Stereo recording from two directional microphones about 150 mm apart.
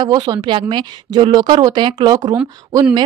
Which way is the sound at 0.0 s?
25° right (ahead or behind).